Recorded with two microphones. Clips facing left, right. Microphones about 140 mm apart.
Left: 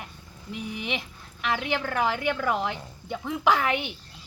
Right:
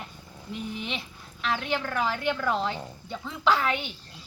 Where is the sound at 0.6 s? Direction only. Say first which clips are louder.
Left 3 dB; 65° left (ahead or behind).